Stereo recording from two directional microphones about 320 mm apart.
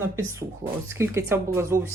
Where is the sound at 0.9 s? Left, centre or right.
Centre.